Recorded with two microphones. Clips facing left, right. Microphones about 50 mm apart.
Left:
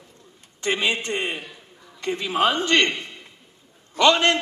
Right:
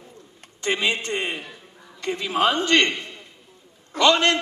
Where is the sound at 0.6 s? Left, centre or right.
Left.